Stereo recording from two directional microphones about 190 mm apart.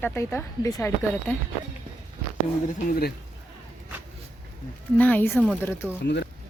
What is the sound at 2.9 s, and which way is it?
Speech, 55° left (ahead or behind).